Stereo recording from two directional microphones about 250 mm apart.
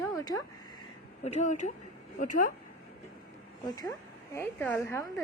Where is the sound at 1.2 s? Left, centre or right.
Left.